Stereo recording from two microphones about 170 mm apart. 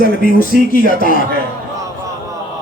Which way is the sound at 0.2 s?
55° left (ahead or behind).